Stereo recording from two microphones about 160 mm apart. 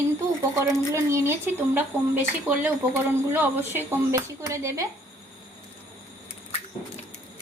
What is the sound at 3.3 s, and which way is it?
Speech, 10° right (ahead or behind).